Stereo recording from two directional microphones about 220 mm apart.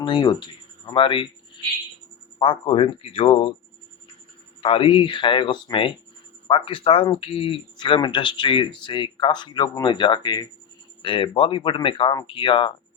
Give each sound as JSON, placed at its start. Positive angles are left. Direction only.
{"t": 0.0, "sound": "speech", "side_deg": 20}
{"t": 2.4, "sound": "speech", "side_deg": 25}
{"t": 4.6, "sound": "speech", "side_deg": 25}